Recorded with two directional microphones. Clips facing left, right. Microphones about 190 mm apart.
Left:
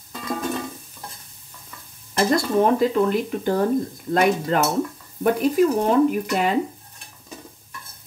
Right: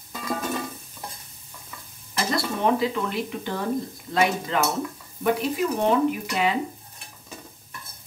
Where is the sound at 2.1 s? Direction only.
45° left (ahead or behind).